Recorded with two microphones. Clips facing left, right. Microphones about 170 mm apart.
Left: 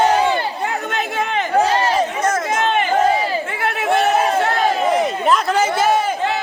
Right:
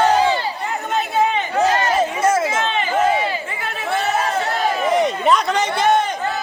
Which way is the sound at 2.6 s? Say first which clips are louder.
Left 4 dB; 55° left (ahead or behind).